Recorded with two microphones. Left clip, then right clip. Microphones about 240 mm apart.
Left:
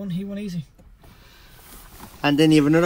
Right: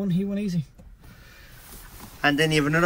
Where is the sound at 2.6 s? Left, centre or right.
Right.